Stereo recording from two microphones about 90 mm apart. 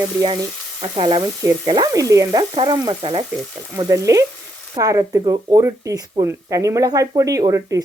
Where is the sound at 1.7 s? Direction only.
50° right (ahead or behind).